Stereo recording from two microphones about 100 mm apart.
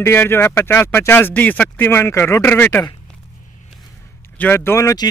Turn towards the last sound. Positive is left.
turn(degrees=35)  # may be behind; listen again after turning